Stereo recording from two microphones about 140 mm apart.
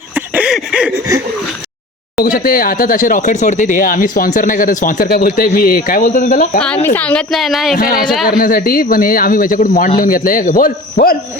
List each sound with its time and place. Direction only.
0.1 s a sound: 10° right (ahead or behind)
2.1 s speech: 90° left
6.8 s a woman's voice: 10° left (ahead or behind)
7.8 s speech: 85° left